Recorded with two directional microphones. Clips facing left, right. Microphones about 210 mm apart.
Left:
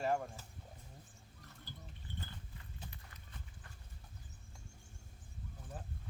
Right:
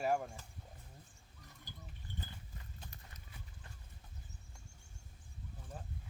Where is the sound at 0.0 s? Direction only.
5° right (ahead or behind).